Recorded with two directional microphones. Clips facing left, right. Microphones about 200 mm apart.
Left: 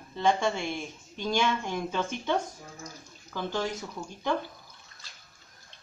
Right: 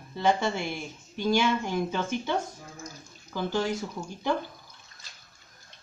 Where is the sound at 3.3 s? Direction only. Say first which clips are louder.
Right 3 dB; 10° right (ahead or behind).